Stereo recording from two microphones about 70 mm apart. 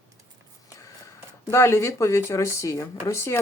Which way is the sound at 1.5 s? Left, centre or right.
Left.